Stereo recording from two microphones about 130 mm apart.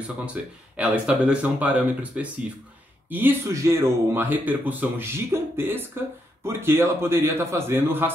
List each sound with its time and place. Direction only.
0.0 s a man's voice: 10° right (ahead or behind)